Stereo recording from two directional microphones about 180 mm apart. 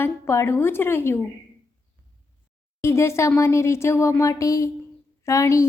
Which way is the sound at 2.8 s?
15° left (ahead or behind).